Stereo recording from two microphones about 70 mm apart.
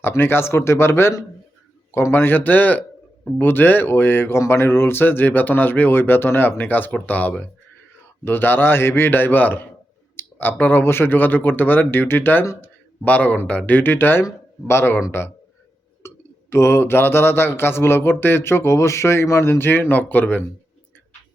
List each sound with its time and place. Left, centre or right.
0.0 s speech: left
13.1 s speech: left
16.0 s speech: left